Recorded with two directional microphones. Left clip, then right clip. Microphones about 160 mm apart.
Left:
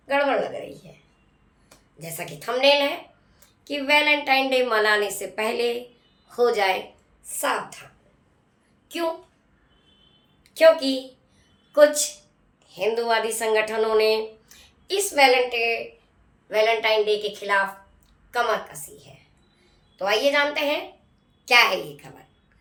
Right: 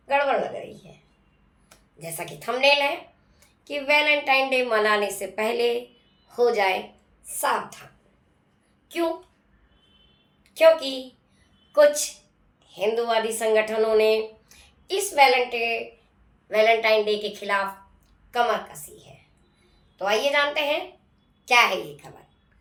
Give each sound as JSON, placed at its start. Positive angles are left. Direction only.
{"t": 0.1, "sound": "a woman's voice", "side_deg": 15}
{"t": 2.0, "sound": "a woman's voice", "side_deg": 15}
{"t": 10.5, "sound": "speech", "side_deg": 20}
{"t": 12.6, "sound": "a woman's voice", "side_deg": 20}
{"t": 20.0, "sound": "a woman's voice", "side_deg": 15}